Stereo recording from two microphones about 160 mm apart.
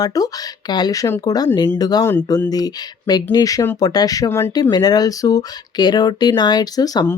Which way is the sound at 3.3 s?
20° left (ahead or behind).